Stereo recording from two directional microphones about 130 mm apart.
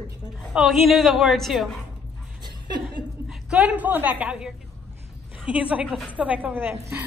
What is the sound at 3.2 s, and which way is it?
A woman's voice, 5° right (ahead or behind).